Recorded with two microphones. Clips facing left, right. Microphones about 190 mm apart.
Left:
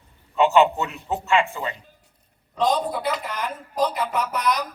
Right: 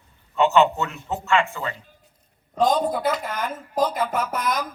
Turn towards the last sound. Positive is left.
turn(degrees=-50)  # may be behind; listen again after turning